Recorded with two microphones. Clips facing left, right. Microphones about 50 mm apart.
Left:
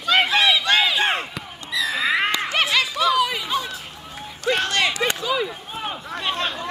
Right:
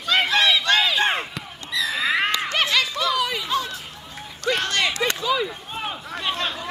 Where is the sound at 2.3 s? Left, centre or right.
Centre.